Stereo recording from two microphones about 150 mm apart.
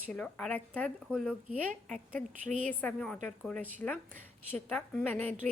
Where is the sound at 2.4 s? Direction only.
60° right (ahead or behind).